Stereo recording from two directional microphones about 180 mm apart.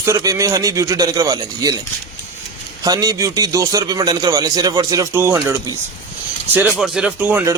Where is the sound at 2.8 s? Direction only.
20° right (ahead or behind).